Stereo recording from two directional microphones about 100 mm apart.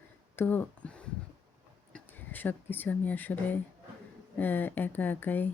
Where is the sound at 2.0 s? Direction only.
20° left (ahead or behind).